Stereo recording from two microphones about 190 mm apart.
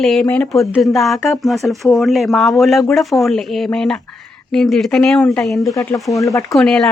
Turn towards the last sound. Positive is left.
turn(degrees=0)  # may be behind; listen again after turning